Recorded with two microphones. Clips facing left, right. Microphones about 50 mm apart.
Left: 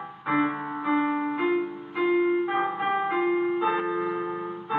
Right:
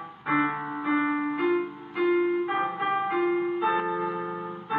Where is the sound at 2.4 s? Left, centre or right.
Centre.